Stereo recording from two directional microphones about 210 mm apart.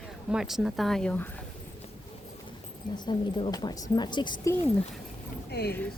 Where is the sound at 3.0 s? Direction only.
20° left (ahead or behind).